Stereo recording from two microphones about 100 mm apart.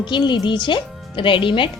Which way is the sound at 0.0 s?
50° left (ahead or behind).